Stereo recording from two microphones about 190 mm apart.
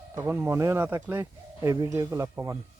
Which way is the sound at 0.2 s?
15° right (ahead or behind).